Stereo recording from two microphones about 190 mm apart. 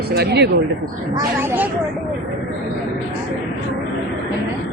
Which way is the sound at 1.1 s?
10° right (ahead or behind).